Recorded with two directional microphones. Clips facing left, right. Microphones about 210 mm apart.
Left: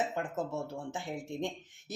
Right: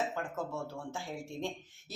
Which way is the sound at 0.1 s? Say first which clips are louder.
Left 3 dB; 20° left (ahead or behind).